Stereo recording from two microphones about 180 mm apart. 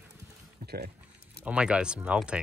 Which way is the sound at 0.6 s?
65° right (ahead or behind).